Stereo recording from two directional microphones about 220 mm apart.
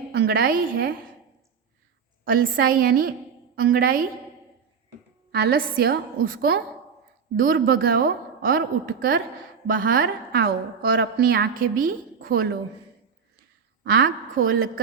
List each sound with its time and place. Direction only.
0.1 s a woman's voice: 45° right (ahead or behind)
2.2 s a woman's voice: 40° right (ahead or behind)
5.3 s a woman's voice: 45° right (ahead or behind)
13.8 s a woman's voice: 40° right (ahead or behind)